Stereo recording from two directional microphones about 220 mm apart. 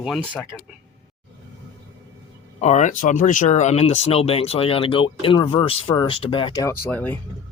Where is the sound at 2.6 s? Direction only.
35° left (ahead or behind); by 7.1 s 10° left (ahead or behind).